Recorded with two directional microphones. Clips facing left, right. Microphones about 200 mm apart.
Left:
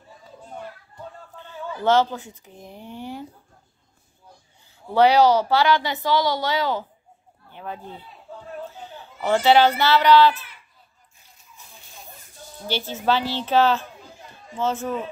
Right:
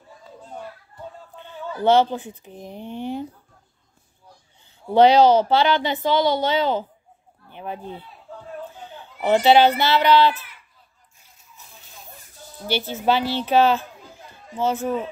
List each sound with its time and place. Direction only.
1.4 s a sound: 20° right (ahead or behind)
1.9 s speech: 20° right (ahead or behind)
4.9 s speech: 20° right (ahead or behind)
9.2 s a woman's voice: 15° right (ahead or behind)
12.6 s a woman's voice: 15° right (ahead or behind)